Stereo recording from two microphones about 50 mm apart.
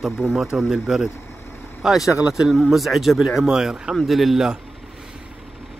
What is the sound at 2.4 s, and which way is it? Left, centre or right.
Speech, centre.